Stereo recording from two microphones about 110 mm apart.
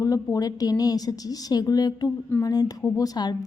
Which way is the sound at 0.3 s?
35° left (ahead or behind).